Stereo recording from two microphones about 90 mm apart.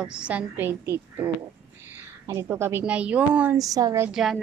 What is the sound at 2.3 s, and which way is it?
Speech, 30° right (ahead or behind).